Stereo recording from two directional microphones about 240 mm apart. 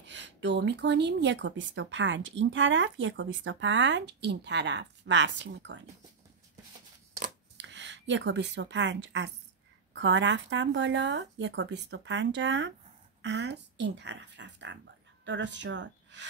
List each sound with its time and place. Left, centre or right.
0.0 s speech: right
7.5 s a woman's voice: right